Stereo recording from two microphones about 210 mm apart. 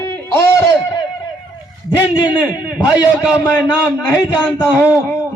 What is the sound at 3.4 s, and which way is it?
A man's voice, 15° left (ahead or behind).